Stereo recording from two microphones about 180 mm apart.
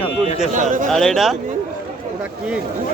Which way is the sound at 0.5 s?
45° right (ahead or behind).